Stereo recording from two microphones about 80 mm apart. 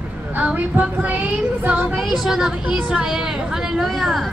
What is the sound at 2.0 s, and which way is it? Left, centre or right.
A woman's voice, centre.